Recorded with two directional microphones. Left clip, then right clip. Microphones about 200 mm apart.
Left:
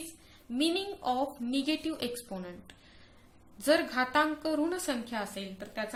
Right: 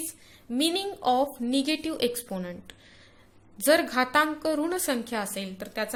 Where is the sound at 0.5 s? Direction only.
40° right (ahead or behind).